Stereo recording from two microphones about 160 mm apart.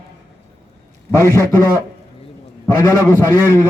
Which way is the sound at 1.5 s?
25° left (ahead or behind).